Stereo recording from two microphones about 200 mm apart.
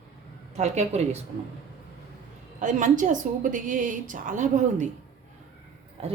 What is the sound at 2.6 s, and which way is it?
A woman's voice, 40° right (ahead or behind).